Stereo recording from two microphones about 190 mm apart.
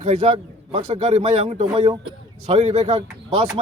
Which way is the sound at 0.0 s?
35° right (ahead or behind).